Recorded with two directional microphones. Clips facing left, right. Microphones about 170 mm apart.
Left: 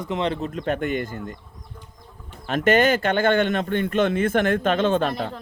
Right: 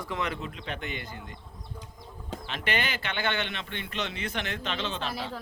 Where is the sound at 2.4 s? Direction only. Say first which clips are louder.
Left 14 dB; 45° left (ahead or behind).